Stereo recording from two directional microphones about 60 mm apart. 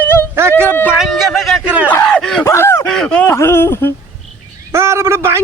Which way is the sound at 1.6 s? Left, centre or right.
Right.